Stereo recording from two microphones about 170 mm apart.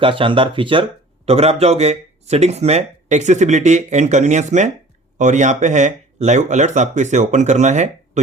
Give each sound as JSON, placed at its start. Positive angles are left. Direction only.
{"t": 0.0, "sound": "speech", "side_deg": -30}